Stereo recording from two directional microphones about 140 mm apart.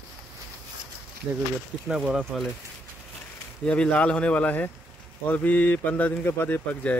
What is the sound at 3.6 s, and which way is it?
Speech, 10° left (ahead or behind).